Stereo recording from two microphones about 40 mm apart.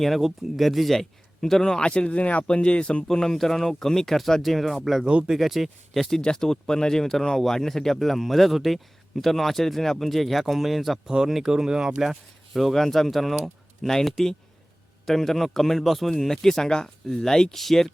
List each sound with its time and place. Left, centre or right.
0.2 s a man's voice: centre
1.8 s speech: left
3.1 s a man's voice: centre
5.0 s speech: right
5.4 s speech: centre
11.0 s speech: centre
12.5 s a man's voice: centre